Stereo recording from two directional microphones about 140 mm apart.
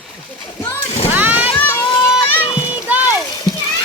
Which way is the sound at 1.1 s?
10° right (ahead or behind).